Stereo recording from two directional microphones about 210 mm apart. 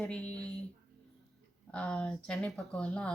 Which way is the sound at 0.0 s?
5° left (ahead or behind).